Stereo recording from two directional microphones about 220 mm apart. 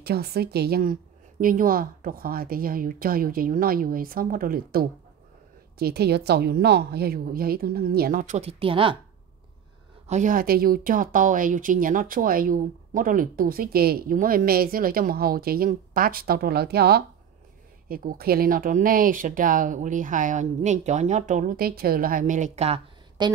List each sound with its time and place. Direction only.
0.0 s a woman's voice: 45° right (ahead or behind); by 8.9 s 25° right (ahead or behind)
10.0 s speech: 35° right (ahead or behind)